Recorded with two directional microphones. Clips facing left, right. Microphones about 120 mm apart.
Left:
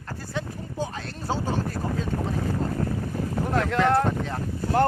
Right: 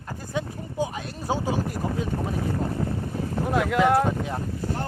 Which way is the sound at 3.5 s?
10° right (ahead or behind).